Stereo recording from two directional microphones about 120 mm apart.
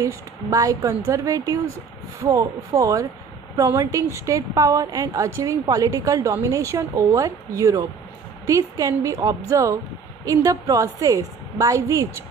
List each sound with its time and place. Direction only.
0.5 s a woman's voice: 25° right (ahead or behind)